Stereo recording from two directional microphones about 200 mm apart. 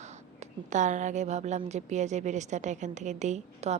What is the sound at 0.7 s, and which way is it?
A woman's voice, 35° right (ahead or behind).